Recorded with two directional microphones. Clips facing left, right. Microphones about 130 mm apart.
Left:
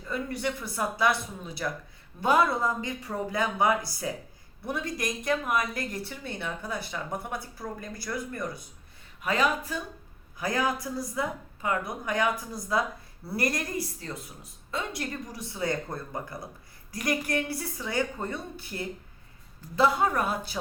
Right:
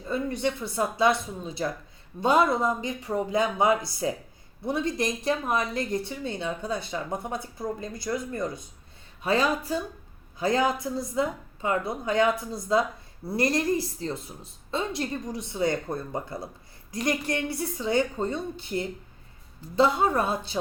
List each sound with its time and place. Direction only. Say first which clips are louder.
0.0 s a woman's voice: right 4 dB; 25° right (ahead or behind)